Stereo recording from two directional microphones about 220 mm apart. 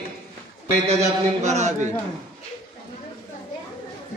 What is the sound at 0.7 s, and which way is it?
A man's voice, 30° right (ahead or behind).